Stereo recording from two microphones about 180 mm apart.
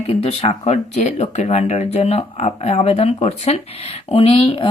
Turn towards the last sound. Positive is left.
turn(degrees=30)  # may be behind; listen again after turning